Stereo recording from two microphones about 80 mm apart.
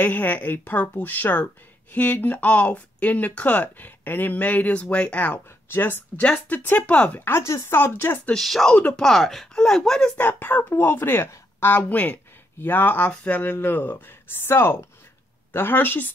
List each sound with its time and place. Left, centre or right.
0.0 s a woman's voice: left
8.4 s speech: centre
8.7 s speech: centre
9.0 s speech: centre
10.1 s a woman's voice: left